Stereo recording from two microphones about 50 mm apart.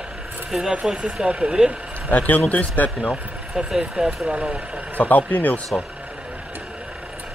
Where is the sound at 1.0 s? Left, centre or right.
Centre.